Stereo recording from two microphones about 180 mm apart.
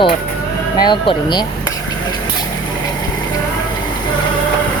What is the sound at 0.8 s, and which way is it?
Speech, 25° left (ahead or behind).